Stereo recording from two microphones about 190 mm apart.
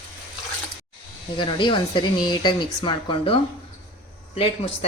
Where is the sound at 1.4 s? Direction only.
25° left (ahead or behind).